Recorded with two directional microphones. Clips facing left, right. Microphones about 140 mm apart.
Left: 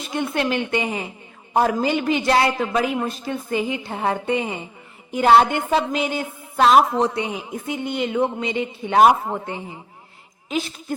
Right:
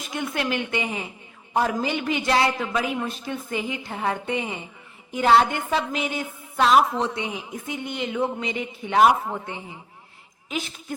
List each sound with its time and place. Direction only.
0.1 s a woman's voice: 30° left (ahead or behind)